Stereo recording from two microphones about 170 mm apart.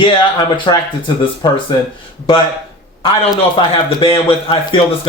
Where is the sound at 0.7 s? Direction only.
30° left (ahead or behind).